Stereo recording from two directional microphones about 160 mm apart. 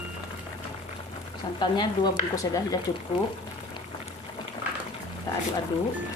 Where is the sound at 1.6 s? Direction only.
30° left (ahead or behind).